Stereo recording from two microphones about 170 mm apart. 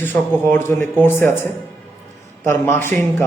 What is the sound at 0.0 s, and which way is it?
A man's voice, 10° left (ahead or behind).